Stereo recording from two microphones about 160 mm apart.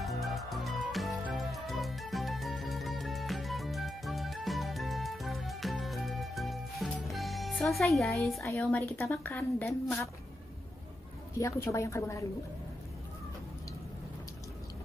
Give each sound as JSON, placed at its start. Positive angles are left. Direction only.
{"t": 0.0, "sound": "music", "side_deg": 0}
{"t": 8.5, "sound": "a woman's voice", "side_deg": 5}
{"t": 11.3, "sound": "a woman's voice", "side_deg": 20}